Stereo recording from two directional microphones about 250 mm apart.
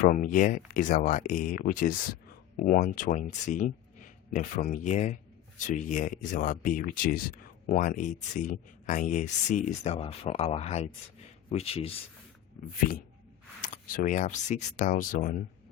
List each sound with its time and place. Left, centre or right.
0.1 s speech: left
13.6 s speech: left